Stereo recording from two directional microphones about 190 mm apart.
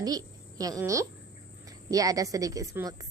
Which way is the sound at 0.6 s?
15° right (ahead or behind).